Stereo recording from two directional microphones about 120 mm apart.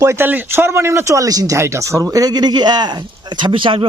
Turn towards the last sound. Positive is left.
turn(degrees=-45)  # may be behind; listen again after turning